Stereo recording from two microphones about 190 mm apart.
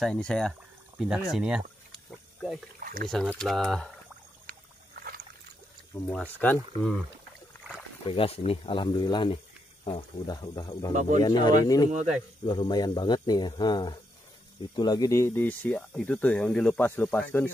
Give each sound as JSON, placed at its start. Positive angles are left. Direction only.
{"t": 0.0, "sound": "speech", "side_deg": 5}
{"t": 1.9, "sound": "a sound", "side_deg": 0}
{"t": 2.8, "sound": "a sound", "side_deg": -50}
{"t": 3.1, "sound": "speech", "side_deg": 5}
{"t": 4.5, "sound": "rowboat", "side_deg": -50}
{"t": 6.0, "sound": "speech", "side_deg": 5}
{"t": 8.0, "sound": "speech", "side_deg": 30}
{"t": 10.9, "sound": "speech", "side_deg": -40}
{"t": 11.2, "sound": "speech", "side_deg": 20}